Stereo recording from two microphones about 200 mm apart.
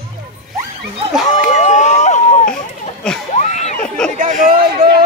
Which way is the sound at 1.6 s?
35° left (ahead or behind).